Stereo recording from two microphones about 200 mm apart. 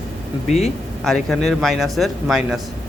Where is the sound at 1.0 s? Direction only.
Centre (ahead or behind).